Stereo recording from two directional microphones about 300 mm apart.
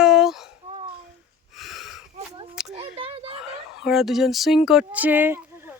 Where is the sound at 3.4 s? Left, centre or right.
Centre.